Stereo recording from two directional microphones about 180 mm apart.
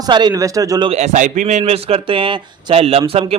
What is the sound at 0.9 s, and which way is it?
A man's voice, 40° right (ahead or behind).